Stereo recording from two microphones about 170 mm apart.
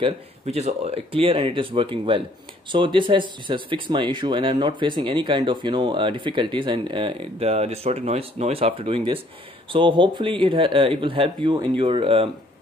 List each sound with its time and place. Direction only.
0.0 s speech: 40° right (ahead or behind)